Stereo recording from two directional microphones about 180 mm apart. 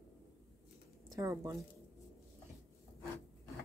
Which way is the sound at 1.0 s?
20° right (ahead or behind).